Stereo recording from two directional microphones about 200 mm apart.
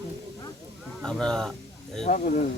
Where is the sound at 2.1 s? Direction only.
40° left (ahead or behind).